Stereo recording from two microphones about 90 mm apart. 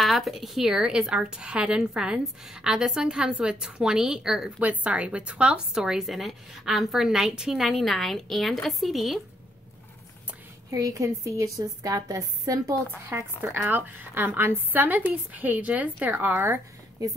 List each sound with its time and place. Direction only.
0.0 s a woman's voice: centre (ahead or behind)
10.7 s a woman's voice: 40° right (ahead or behind)
13.0 s a woman's voice: 25° right (ahead or behind)